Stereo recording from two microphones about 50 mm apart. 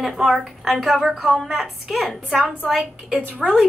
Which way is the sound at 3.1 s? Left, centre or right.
Right.